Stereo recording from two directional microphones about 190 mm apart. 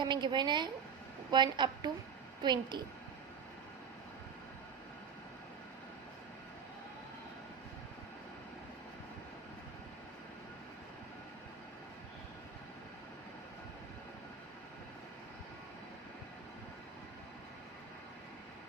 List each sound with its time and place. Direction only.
0.0 s a woman's voice: 25° right (ahead or behind)